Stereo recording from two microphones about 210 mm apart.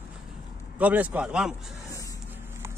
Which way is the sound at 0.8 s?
5° right (ahead or behind).